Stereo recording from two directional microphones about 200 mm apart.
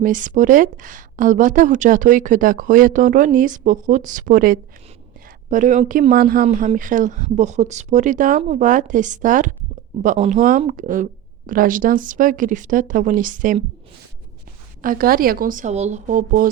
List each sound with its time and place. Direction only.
0.0 s a woman's voice: 40° right (ahead or behind)
14.8 s speech: 45° right (ahead or behind)